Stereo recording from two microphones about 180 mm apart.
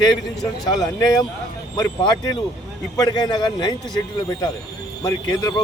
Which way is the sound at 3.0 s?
20° left (ahead or behind).